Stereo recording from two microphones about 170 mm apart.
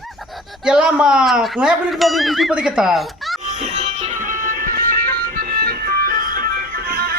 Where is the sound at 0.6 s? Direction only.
5° right (ahead or behind).